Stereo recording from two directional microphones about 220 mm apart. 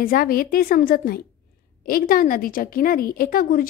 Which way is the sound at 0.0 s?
40° left (ahead or behind).